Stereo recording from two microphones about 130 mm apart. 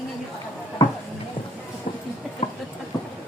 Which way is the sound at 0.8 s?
35° left (ahead or behind).